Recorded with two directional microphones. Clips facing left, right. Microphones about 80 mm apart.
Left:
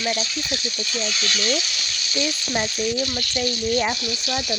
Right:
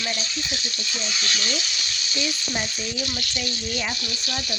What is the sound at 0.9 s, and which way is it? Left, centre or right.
Speech, centre.